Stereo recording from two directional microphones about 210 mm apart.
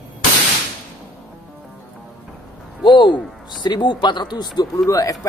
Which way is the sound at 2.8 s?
20° left (ahead or behind).